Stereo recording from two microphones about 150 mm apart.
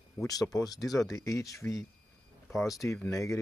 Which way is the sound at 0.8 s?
Centre (ahead or behind).